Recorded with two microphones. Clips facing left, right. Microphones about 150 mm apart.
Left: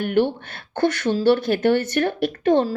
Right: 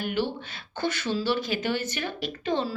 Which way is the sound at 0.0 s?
60° left (ahead or behind).